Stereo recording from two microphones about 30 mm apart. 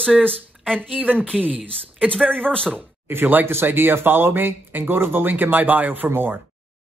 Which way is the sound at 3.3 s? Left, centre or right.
Right.